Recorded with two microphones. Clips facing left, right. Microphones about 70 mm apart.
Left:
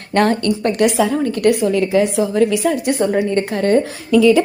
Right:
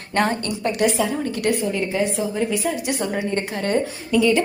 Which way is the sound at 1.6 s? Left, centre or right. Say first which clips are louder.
Left 7 dB; left.